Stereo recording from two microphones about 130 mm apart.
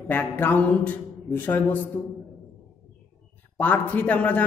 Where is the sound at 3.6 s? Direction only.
10° left (ahead or behind).